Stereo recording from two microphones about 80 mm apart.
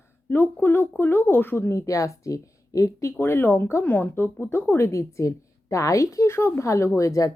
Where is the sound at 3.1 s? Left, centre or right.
Left.